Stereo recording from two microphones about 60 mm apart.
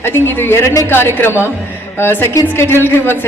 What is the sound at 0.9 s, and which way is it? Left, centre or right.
A woman's voice, left.